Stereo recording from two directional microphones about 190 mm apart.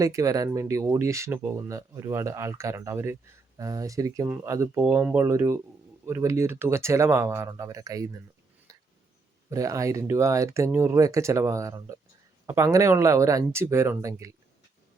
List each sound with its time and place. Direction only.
0.0 s speech: 15° right (ahead or behind)
9.5 s speech: 15° right (ahead or behind)